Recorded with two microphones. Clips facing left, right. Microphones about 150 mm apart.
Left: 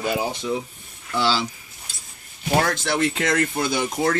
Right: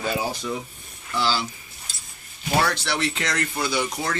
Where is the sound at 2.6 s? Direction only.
50° left (ahead or behind).